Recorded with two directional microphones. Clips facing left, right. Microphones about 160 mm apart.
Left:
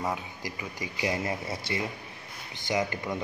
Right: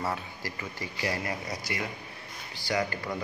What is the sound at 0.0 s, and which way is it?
Speech, 15° left (ahead or behind).